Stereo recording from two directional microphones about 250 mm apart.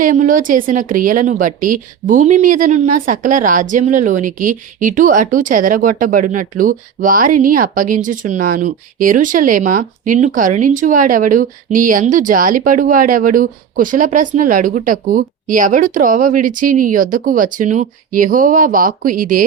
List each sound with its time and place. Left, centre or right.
0.0 s a woman's voice: right